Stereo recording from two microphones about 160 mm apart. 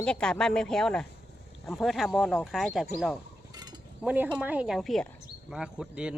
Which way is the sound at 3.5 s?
25° right (ahead or behind).